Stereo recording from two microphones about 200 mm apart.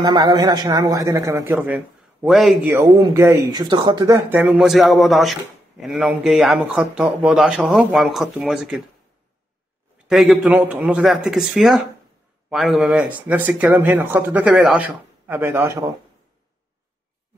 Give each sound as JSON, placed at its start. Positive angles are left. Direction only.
{"t": 0.0, "sound": "speech", "side_deg": -20}
{"t": 4.4, "sound": "speech", "side_deg": 0}
{"t": 10.0, "sound": "speech", "side_deg": 0}